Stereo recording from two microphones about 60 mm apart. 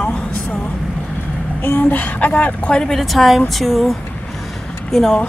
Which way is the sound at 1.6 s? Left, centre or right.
Left.